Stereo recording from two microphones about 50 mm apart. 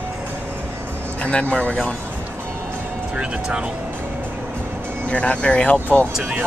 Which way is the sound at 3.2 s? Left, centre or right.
Centre.